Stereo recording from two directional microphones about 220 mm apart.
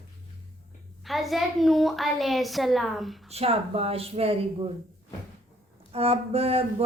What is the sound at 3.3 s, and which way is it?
A woman's voice, 25° right (ahead or behind).